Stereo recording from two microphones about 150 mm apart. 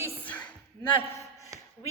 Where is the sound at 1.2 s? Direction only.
20° left (ahead or behind).